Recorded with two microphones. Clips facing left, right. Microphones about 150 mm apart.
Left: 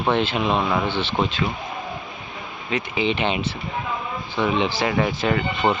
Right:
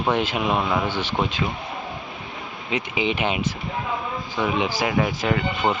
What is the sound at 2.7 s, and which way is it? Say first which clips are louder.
Speech: left 1 dB; 15° right (ahead or behind).